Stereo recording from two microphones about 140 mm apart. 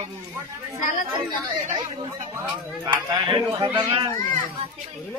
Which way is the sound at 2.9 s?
35° right (ahead or behind).